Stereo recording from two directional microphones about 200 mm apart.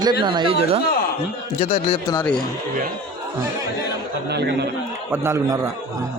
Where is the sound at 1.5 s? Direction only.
30° left (ahead or behind).